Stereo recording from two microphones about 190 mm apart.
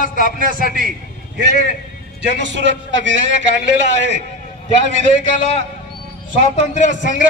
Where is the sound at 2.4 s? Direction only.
70° right (ahead or behind).